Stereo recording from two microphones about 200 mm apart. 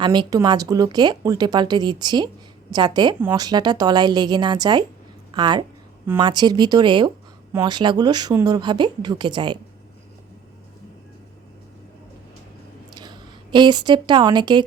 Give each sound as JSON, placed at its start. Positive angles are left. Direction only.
{"t": 0.0, "sound": "speech", "side_deg": -20}
{"t": 13.0, "sound": "a woman's voice", "side_deg": -20}